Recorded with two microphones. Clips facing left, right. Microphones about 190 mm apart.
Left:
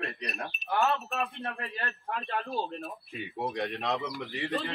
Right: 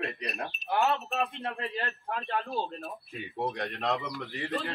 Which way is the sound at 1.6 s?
20° right (ahead or behind).